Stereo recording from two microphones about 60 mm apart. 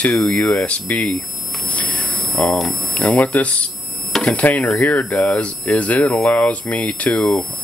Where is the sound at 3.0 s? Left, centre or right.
Left.